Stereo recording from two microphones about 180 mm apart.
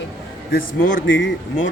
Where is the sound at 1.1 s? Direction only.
90° left.